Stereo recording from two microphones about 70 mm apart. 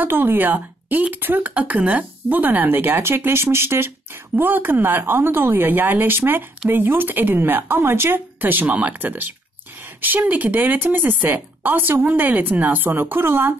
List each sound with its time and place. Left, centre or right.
0.0 s speech: right